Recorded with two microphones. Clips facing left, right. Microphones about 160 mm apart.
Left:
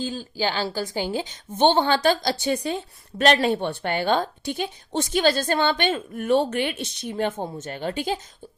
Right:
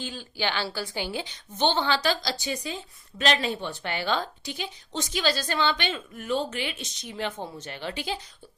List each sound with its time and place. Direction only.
0.0 s a woman's voice: 40° left (ahead or behind)